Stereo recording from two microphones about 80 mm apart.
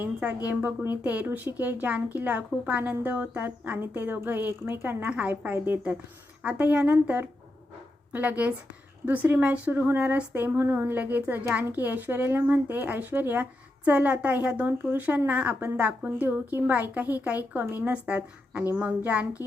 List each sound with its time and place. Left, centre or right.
0.0 s a woman's voice: centre